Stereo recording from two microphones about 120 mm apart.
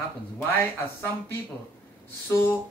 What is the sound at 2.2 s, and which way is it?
Speech, 20° left (ahead or behind).